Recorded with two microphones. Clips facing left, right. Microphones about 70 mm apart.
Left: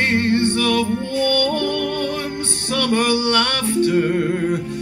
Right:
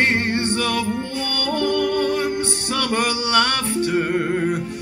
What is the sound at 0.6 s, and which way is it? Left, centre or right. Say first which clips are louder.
Music: left 3 dB; centre.